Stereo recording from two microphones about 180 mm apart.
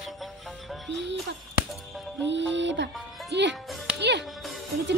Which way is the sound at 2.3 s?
85° right.